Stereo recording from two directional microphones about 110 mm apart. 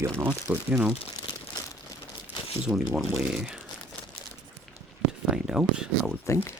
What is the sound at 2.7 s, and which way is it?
Speech, 10° right (ahead or behind).